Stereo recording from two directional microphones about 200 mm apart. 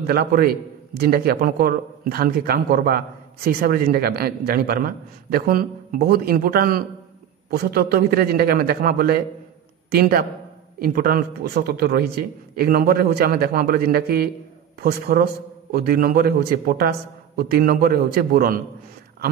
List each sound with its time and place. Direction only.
0.0 s a man's voice: 50° right (ahead or behind)